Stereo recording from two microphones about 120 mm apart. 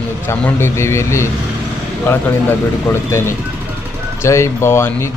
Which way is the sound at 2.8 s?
20° left (ahead or behind).